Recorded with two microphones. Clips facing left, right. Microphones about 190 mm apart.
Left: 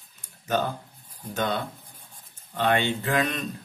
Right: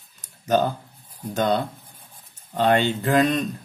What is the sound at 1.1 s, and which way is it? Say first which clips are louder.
Speech: right 6 dB; 40° right (ahead or behind).